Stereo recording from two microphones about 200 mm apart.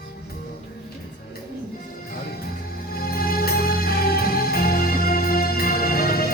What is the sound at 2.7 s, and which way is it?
Music, 50° left (ahead or behind).